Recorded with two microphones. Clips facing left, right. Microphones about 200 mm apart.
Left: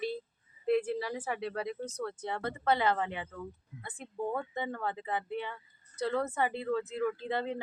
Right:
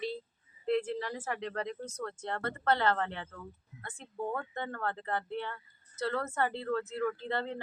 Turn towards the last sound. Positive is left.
turn(degrees=10)  # may be behind; listen again after turning